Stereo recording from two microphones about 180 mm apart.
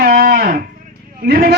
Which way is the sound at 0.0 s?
55° right (ahead or behind).